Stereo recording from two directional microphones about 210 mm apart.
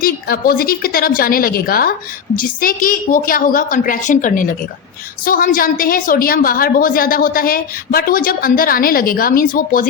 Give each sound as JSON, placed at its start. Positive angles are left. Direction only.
{"t": 0.0, "sound": "a woman's voice", "side_deg": 45}